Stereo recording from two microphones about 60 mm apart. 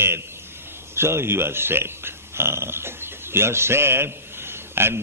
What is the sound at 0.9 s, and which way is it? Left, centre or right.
A man's voice, right.